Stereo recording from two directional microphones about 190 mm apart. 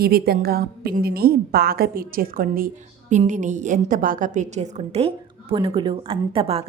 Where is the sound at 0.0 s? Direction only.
55° right (ahead or behind).